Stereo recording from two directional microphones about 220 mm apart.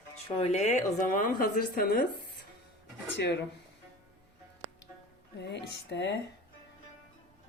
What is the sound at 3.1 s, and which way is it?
Speech, 50° left (ahead or behind).